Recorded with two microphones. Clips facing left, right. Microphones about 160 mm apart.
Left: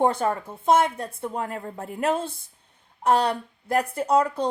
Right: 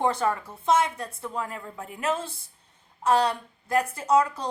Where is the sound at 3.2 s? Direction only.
30° left (ahead or behind).